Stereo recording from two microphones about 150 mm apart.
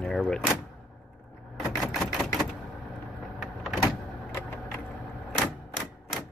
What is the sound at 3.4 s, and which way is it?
Power windows, centre (ahead or behind).